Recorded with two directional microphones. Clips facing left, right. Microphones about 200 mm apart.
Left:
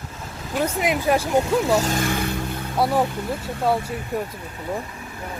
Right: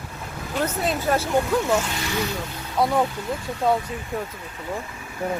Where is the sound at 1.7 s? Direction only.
40° left (ahead or behind).